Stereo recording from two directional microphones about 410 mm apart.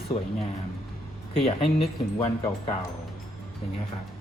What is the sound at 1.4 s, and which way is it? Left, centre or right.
A man's voice, centre.